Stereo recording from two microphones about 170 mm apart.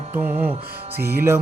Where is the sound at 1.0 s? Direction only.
65° right (ahead or behind).